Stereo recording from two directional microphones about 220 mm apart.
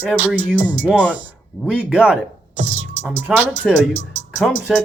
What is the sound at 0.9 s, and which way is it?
Music, 5° left (ahead or behind).